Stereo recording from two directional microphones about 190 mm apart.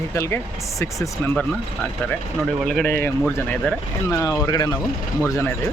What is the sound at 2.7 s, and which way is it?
Speech, 5° left (ahead or behind).